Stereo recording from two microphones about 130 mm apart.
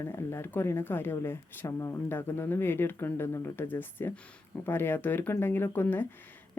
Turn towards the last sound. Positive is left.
turn(degrees=15)  # may be behind; listen again after turning